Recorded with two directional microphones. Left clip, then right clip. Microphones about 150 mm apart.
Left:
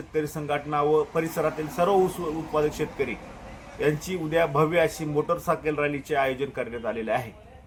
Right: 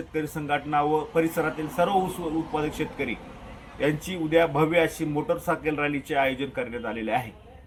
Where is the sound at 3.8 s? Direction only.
20° left (ahead or behind).